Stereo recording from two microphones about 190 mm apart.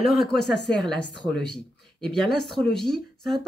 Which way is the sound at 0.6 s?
65° left (ahead or behind).